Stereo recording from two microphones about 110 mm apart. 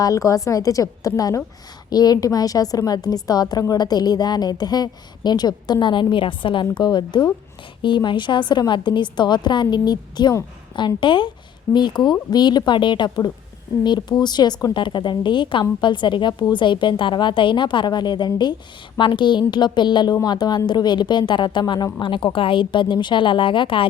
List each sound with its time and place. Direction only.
0.0 s a woman's voice: 30° left (ahead or behind); by 23.8 s 50° left (ahead or behind)